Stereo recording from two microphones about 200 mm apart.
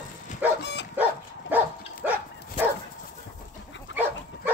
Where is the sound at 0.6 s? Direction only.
60° left (ahead or behind).